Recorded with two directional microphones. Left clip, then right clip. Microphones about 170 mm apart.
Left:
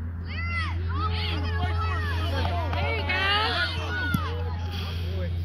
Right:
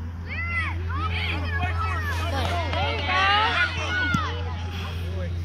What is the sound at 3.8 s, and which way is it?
Music, 40° left (ahead or behind).